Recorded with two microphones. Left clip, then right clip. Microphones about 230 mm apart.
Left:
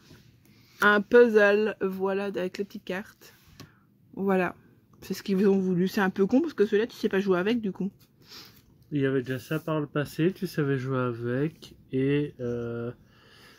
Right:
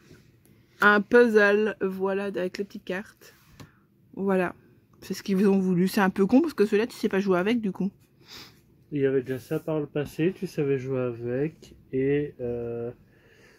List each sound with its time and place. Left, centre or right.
0.7 s speech: centre
8.9 s speech: left